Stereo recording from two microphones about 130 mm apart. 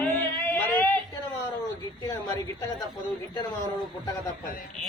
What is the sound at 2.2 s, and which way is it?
Speech, 35° left (ahead or behind).